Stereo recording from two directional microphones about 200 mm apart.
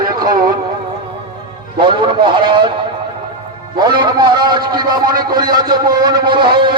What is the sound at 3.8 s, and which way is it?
A man's voice, 20° right (ahead or behind).